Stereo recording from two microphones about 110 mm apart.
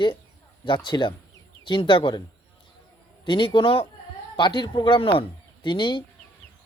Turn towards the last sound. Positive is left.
turn(degrees=45)  # may be behind; listen again after turning